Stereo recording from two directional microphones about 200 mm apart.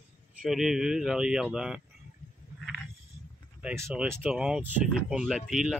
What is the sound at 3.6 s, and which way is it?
Speech, 5° right (ahead or behind).